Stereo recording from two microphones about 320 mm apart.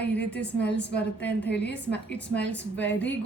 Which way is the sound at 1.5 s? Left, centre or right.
Left.